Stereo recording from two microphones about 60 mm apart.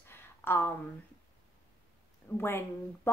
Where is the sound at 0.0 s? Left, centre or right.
Left.